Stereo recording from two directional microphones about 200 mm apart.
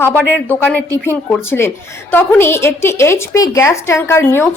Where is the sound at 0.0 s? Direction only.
10° left (ahead or behind).